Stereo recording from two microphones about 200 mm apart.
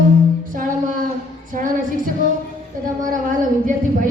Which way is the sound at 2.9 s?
40° right (ahead or behind).